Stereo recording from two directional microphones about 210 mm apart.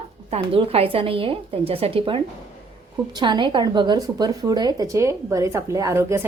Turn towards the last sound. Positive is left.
turn(degrees=-15)  # may be behind; listen again after turning